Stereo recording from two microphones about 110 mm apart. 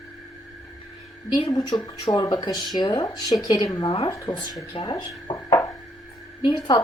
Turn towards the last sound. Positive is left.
turn(degrees=35)  # may be behind; listen again after turning